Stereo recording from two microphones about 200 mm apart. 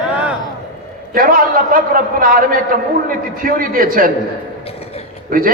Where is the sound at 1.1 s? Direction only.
45° right (ahead or behind).